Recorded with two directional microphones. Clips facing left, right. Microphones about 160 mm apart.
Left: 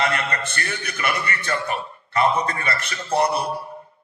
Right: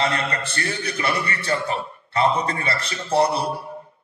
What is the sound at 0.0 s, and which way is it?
A man's voice, 30° right (ahead or behind).